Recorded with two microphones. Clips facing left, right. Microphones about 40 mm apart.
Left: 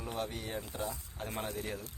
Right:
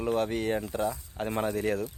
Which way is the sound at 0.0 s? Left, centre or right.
Right.